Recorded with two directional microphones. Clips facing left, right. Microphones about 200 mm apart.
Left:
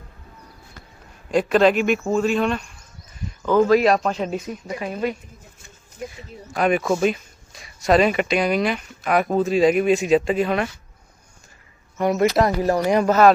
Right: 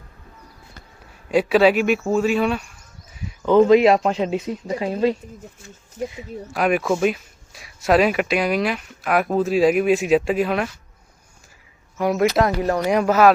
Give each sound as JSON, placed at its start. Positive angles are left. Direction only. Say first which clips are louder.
{"t": 1.3, "sound": "speech", "louder": "right 1 dB", "side_deg": -5}
{"t": 3.1, "sound": "a sound", "louder": "left 1 dB", "side_deg": -10}
{"t": 3.4, "sound": "speech", "louder": "right 3 dB", "side_deg": -20}
{"t": 6.5, "sound": "speech", "louder": "even", "side_deg": -5}
{"t": 11.9, "sound": "speech", "louder": "even", "side_deg": 0}